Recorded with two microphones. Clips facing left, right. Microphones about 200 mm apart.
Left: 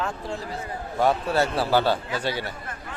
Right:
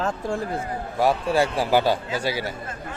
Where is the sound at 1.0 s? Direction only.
10° right (ahead or behind).